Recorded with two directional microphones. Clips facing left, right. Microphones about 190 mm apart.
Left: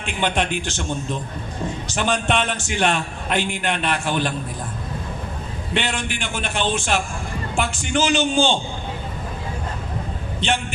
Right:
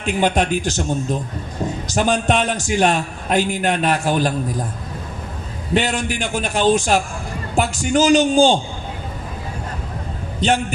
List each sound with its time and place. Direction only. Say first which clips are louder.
0.0 s a man's voice: right 5 dB; 40° right (ahead or behind)
5.7 s a man's voice: right 6 dB; 40° right (ahead or behind)